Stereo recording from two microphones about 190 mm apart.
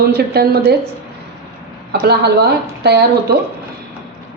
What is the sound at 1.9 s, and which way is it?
Speech, 60° right (ahead or behind).